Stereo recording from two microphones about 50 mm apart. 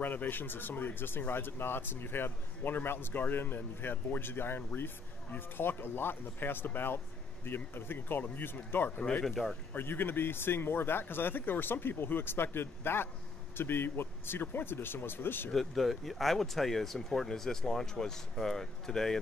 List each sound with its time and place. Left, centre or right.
0.0 s speech: left
9.2 s speech: centre
9.8 s speech: left
15.5 s speech: centre